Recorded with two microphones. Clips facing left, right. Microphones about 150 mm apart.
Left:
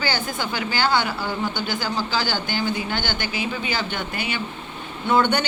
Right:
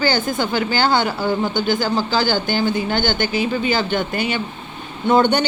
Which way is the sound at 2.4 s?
45° right (ahead or behind).